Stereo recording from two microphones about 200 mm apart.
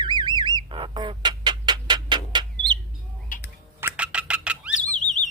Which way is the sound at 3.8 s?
10° right (ahead or behind).